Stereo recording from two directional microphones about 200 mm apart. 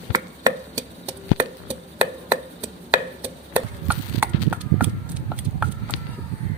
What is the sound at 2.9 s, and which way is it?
Chop, 10° right (ahead or behind).